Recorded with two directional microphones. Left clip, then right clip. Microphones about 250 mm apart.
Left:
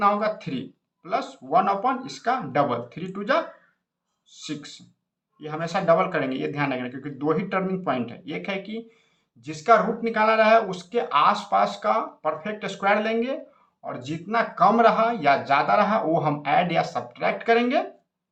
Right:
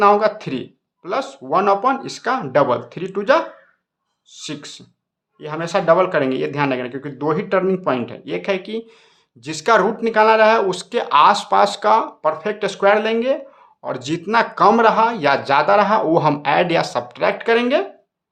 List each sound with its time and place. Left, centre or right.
0.0 s speech: right